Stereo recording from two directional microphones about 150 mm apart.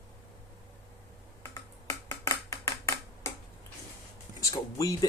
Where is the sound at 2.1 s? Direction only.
20° left (ahead or behind).